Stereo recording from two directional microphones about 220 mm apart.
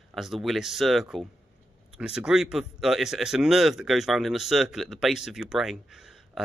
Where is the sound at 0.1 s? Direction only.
Centre (ahead or behind).